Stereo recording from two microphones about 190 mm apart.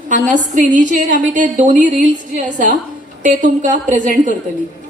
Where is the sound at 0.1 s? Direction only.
40° right (ahead or behind).